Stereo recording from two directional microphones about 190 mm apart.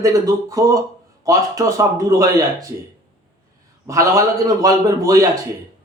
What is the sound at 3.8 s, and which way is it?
Speech, 15° right (ahead or behind).